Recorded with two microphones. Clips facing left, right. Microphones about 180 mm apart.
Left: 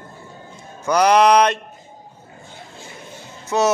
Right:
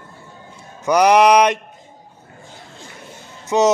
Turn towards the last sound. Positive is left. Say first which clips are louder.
# right 3 dB
turn(degrees=-15)  # may be behind; listen again after turning